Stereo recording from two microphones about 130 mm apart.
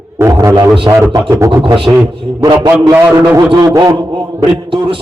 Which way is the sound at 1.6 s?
40° right (ahead or behind).